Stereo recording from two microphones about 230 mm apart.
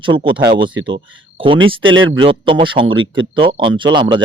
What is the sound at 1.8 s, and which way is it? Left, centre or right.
Speech, right.